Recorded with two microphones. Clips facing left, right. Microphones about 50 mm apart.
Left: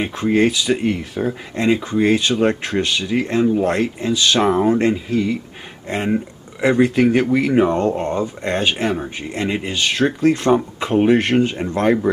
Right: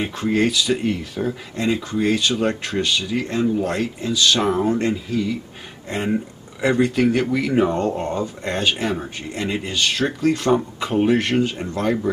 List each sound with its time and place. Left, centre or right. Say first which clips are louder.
0.0 s speech: left 2 dB; centre
0.3 s speech: left 3 dB; centre
4.7 s speech: left 4 dB; left
5.9 s speech: left 2 dB; centre
11.7 s speech: left 6 dB; left